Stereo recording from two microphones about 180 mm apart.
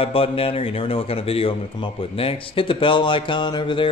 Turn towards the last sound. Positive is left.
turn(degrees=25)  # may be behind; listen again after turning